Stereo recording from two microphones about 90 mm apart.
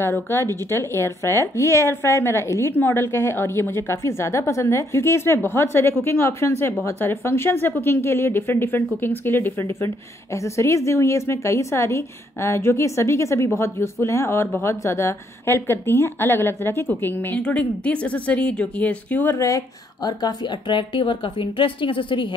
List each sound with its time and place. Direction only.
0.0 s speech: 30° left (ahead or behind)
19.3 s a woman's voice: 35° left (ahead or behind); by 22.3 s 70° left (ahead or behind)